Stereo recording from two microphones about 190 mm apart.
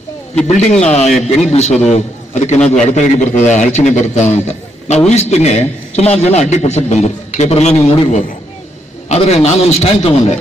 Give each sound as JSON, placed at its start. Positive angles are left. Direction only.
{"t": 0.5, "sound": "a man's voice", "side_deg": 35}